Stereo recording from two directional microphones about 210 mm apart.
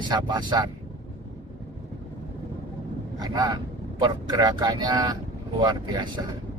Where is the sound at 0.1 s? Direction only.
20° right (ahead or behind).